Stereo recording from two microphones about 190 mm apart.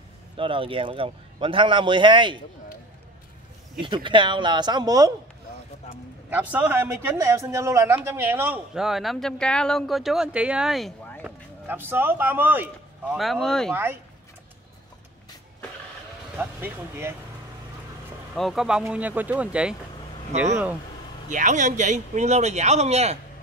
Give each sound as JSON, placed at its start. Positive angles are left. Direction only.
{"t": 0.4, "sound": "a man's voice", "side_deg": -25}
{"t": 3.8, "sound": "a man's voice", "side_deg": -25}
{"t": 6.3, "sound": "a man's voice", "side_deg": -10}
{"t": 16.3, "sound": "speech", "side_deg": -10}
{"t": 18.3, "sound": "speech", "side_deg": 0}
{"t": 20.3, "sound": "speech", "side_deg": -35}